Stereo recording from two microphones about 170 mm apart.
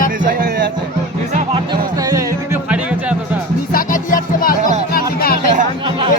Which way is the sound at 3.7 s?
55° left (ahead or behind).